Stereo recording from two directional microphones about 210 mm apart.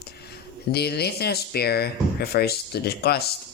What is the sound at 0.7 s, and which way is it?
Speech, 50° left (ahead or behind).